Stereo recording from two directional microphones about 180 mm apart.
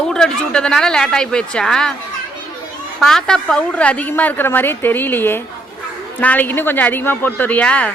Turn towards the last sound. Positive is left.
turn(degrees=5)  # may be behind; listen again after turning